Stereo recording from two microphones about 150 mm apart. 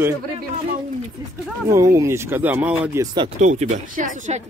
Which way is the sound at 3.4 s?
55° right (ahead or behind).